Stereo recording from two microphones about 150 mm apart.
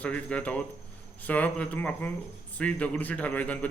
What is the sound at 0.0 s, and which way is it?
A man's voice, 10° left (ahead or behind).